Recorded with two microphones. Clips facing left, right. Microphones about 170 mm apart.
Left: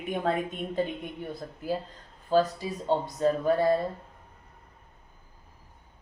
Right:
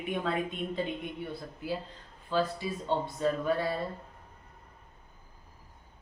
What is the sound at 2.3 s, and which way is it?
A woman's voice, 40° left (ahead or behind).